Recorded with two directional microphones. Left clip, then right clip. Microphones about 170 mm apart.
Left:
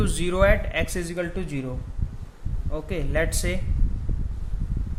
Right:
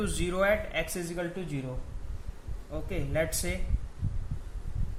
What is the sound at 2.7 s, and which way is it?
Speech, 35° left (ahead or behind).